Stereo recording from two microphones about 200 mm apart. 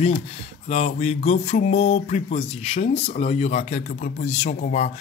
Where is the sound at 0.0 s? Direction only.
30° left (ahead or behind).